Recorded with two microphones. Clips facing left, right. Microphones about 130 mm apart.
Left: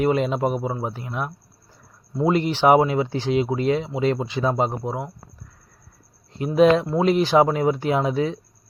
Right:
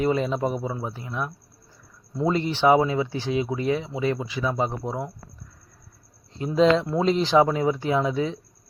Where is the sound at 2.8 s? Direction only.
25° left (ahead or behind).